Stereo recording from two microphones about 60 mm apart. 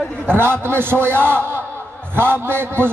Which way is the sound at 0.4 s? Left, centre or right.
Right.